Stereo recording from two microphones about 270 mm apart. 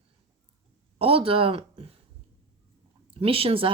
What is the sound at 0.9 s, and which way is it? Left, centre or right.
Speech, right.